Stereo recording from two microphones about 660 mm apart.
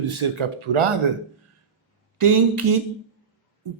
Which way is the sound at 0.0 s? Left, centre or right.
Right.